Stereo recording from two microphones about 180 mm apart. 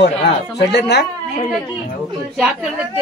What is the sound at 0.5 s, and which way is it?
Speech, 70° left (ahead or behind).